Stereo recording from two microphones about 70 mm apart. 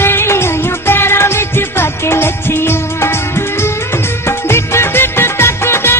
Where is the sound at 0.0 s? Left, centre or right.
Left.